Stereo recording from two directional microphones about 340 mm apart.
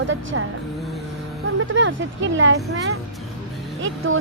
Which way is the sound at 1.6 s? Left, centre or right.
Right.